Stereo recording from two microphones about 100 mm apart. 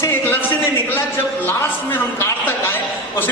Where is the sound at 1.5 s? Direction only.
25° left (ahead or behind).